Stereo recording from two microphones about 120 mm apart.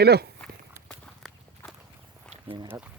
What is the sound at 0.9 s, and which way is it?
Walk, 5° left (ahead or behind).